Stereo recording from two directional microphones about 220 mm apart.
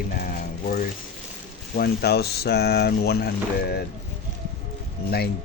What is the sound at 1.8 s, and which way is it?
Speech, 45° left (ahead or behind).